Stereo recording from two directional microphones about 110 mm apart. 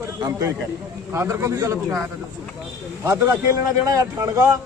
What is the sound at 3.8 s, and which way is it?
Speech, 30° right (ahead or behind).